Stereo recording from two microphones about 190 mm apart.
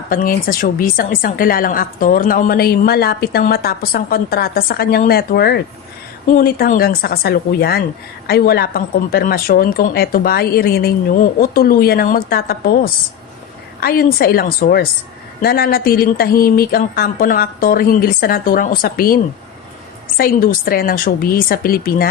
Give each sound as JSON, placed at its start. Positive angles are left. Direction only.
{"t": 0.1, "sound": "a woman's voice", "side_deg": 50}